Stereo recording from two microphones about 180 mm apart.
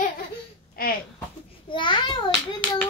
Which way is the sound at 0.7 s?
55° left (ahead or behind).